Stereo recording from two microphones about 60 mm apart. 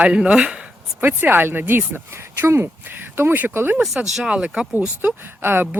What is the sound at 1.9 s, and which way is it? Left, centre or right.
Speech, right.